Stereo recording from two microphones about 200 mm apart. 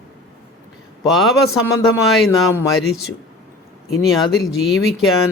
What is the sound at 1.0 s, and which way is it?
A man's voice, centre (ahead or behind).